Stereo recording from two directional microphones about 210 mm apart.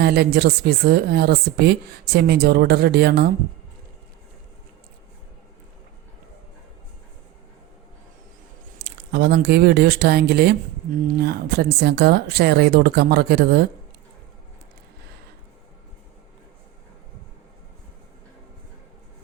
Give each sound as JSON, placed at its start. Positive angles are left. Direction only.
{"t": 0.0, "sound": "speech", "side_deg": -50}
{"t": 8.8, "sound": "speech", "side_deg": -50}